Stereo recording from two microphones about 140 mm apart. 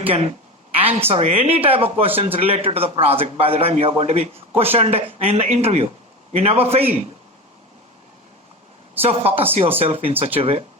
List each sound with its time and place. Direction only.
0.8 s speech: 45° right (ahead or behind)
9.0 s speech: 45° right (ahead or behind)